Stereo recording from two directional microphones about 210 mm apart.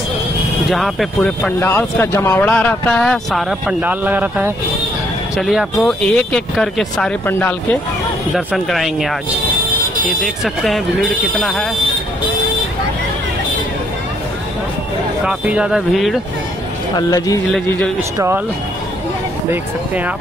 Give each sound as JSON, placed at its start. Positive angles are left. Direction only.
{"t": 0.7, "sound": "speech", "side_deg": 0}
{"t": 1.6, "sound": "speech", "side_deg": 10}
{"t": 8.4, "sound": "speech", "side_deg": 0}
{"t": 10.2, "sound": "speech", "side_deg": 0}
{"t": 15.2, "sound": "speech", "side_deg": -5}
{"t": 16.9, "sound": "speech", "side_deg": 15}
{"t": 17.5, "sound": "speech", "side_deg": 5}
{"t": 18.1, "sound": "speech", "side_deg": -15}